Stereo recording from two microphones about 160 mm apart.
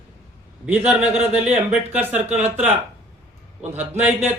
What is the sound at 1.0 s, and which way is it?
Speech, 40° right (ahead or behind).